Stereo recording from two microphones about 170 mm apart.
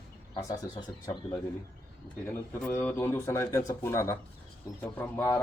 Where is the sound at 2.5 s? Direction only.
5° left (ahead or behind).